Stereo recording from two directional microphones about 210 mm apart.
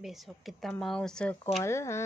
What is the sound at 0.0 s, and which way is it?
Speech, centre (ahead or behind).